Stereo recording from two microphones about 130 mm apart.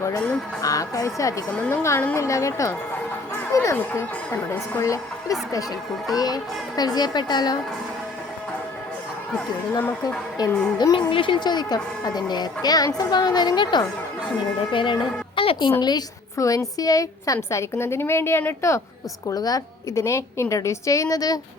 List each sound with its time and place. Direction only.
0.0 s a woman's voice: 20° left (ahead or behind)
1.5 s a woman's voice: 10° left (ahead or behind)
1.8 s a woman's voice: 20° left (ahead or behind)
10.4 s a woman's voice: 30° left (ahead or behind)
15.8 s a woman's voice: 30° left (ahead or behind)